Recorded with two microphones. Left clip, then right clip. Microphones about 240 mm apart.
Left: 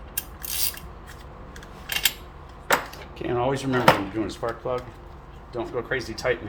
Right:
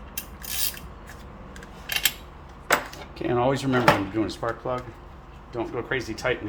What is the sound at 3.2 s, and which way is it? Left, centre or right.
Speech, right.